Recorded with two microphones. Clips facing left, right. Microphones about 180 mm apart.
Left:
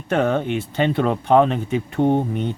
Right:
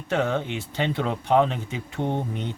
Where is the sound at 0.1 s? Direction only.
55° left (ahead or behind).